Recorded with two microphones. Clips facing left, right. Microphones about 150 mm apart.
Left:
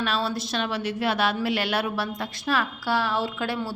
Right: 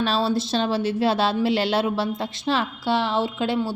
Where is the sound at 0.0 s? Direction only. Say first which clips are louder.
Right 5 dB; 30° right (ahead or behind).